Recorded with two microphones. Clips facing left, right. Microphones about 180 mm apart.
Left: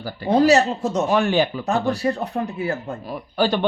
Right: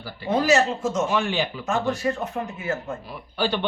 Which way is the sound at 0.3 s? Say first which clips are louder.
Left 4 dB; 35° left (ahead or behind).